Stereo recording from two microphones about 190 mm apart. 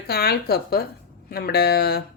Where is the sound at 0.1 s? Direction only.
55° left (ahead or behind).